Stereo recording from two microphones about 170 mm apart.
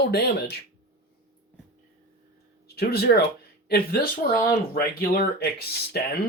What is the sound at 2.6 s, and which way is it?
Speech, 70° left (ahead or behind).